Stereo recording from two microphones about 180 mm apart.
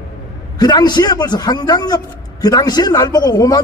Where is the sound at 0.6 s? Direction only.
25° left (ahead or behind).